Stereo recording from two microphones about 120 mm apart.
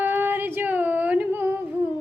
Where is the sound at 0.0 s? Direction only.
15° right (ahead or behind).